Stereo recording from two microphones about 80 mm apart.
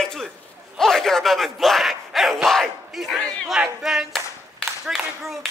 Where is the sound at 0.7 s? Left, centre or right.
Centre.